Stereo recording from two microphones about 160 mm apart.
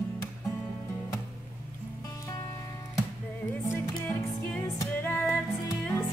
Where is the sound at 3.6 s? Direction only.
15° left (ahead or behind).